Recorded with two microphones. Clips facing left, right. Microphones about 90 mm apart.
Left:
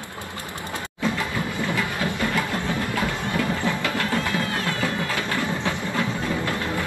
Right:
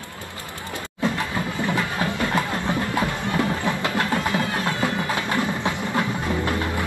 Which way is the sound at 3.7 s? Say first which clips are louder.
Right 1 dB; 20° right (ahead or behind).